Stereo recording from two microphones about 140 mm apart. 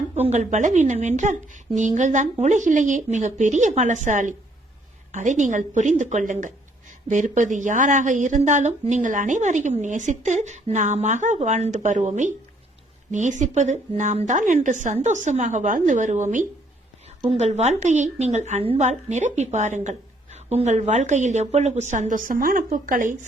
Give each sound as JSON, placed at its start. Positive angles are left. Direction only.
{"t": 0.1, "sound": "a woman's voice", "side_deg": -50}